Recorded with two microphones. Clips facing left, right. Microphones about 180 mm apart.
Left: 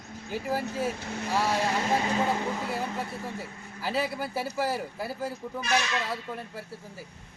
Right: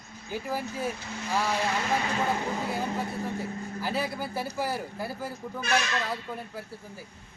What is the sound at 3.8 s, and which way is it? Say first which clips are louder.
A man's voice: left 2 dB; centre (ahead or behind).